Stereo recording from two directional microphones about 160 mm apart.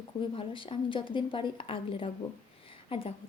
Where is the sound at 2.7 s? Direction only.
35° left (ahead or behind).